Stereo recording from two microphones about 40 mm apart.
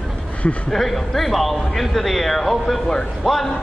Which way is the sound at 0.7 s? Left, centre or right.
Centre.